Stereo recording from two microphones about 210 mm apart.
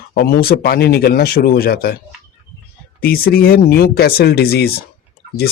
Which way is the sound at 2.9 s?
45° left (ahead or behind).